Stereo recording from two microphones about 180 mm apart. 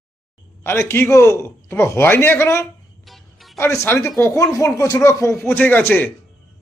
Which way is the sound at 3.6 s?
15° left (ahead or behind).